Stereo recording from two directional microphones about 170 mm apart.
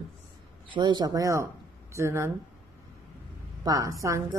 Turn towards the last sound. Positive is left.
turn(degrees=-20)  # may be behind; listen again after turning